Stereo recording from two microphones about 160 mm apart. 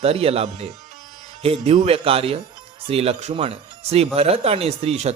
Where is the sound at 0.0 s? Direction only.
40° right (ahead or behind).